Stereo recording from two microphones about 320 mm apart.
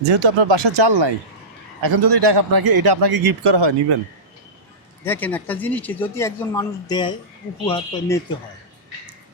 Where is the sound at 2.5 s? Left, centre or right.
Right.